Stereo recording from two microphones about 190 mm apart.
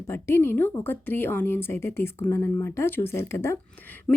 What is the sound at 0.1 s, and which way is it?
A woman's voice, 15° left (ahead or behind).